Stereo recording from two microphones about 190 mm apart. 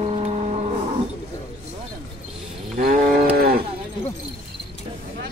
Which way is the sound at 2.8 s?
50° right (ahead or behind).